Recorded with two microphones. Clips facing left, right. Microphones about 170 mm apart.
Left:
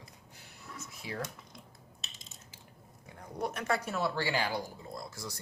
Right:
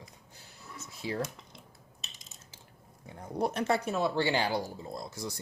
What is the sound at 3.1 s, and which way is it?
Speech, 30° right (ahead or behind).